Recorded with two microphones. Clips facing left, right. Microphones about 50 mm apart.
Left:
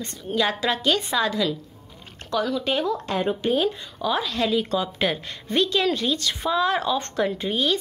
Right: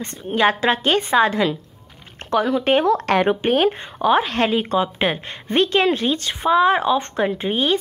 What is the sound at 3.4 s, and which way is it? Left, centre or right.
Speech, right.